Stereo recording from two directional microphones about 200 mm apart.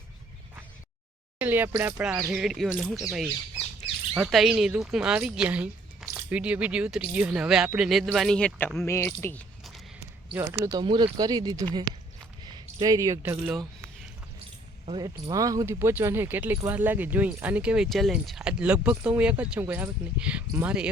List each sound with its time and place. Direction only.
1.4 s speech: 10° right (ahead or behind); by 9.4 s 10° left (ahead or behind)
10.3 s speech: 15° right (ahead or behind)
14.8 s speech: 20° right (ahead or behind)